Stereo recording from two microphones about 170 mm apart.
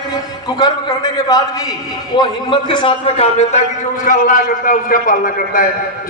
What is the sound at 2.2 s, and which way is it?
A man's voice, 25° left (ahead or behind).